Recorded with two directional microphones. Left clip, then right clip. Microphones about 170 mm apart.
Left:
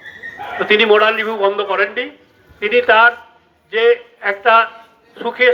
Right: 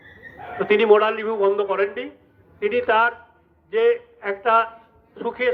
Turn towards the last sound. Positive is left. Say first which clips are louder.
# left 9 dB
turn(degrees=-60)  # may be behind; listen again after turning